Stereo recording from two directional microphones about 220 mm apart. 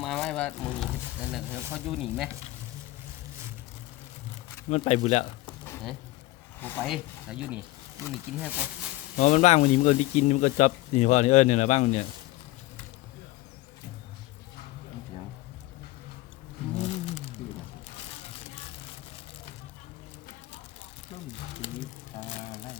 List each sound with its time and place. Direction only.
0.0 s music: centre (ahead or behind)
1.2 s a sound: centre (ahead or behind)
1.5 s snake: 10° right (ahead or behind)
1.9 s speech: centre (ahead or behind)
4.7 s speech: 30° left (ahead or behind)
6.6 s speech: 10° left (ahead or behind)
6.8 s speech: 5° right (ahead or behind)
9.1 s speech: 35° left (ahead or behind)
16.8 s a sound: 30° left (ahead or behind)